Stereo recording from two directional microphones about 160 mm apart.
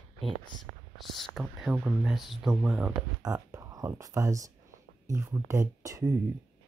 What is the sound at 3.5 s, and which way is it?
Speech, 20° right (ahead or behind).